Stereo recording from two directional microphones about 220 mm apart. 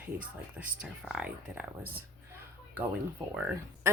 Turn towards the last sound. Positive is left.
turn(degrees=-5)  # may be behind; listen again after turning